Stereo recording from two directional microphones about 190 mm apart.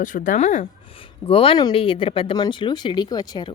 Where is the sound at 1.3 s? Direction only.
30° left (ahead or behind).